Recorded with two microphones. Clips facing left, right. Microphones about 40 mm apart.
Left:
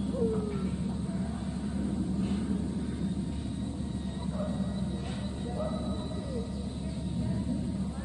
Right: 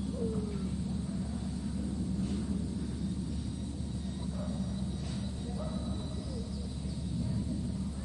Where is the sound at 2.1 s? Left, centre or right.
Left.